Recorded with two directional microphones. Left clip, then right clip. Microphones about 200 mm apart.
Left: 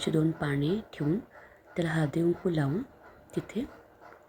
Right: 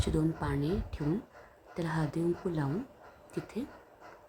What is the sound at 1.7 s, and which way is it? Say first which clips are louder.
Speech: left 5 dB; 10° left (ahead or behind).